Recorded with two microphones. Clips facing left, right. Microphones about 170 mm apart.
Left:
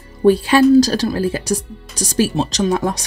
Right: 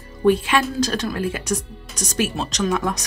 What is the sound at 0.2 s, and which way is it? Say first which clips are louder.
Speech: left 6 dB; 35° left (ahead or behind).